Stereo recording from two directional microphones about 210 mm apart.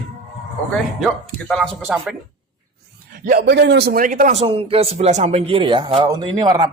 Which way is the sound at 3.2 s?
50° right (ahead or behind).